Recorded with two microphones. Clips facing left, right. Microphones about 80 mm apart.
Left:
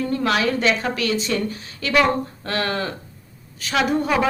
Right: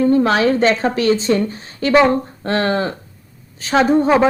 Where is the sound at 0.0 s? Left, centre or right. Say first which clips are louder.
Right 7 dB; right.